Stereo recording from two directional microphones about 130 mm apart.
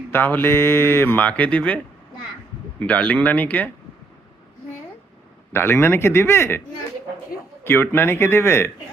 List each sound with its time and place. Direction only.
0.1 s speech: 15° left (ahead or behind)
5.5 s a man's voice: 15° left (ahead or behind)
7.6 s speech: 15° left (ahead or behind)